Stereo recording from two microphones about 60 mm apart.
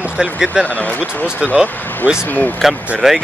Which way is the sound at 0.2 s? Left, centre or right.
Centre.